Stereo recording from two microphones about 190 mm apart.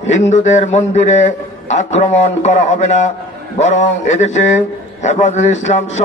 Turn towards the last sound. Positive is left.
turn(degrees=40)  # may be behind; listen again after turning